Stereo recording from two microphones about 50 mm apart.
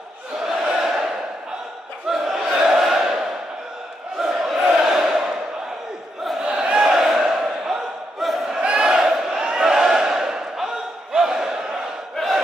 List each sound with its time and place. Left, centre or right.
0.4 s a sound: centre
2.0 s battle cry: centre
4.2 s crowd: centre
4.6 s a sound: centre
6.4 s battle cry: centre
9.5 s crowd: centre